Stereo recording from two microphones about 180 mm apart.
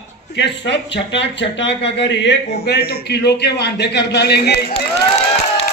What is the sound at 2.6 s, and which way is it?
A man's voice, 60° left (ahead or behind).